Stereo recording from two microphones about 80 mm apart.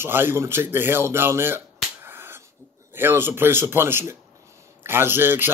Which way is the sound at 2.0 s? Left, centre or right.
Right.